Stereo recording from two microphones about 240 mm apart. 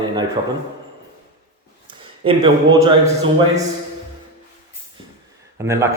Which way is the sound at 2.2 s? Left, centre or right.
Centre.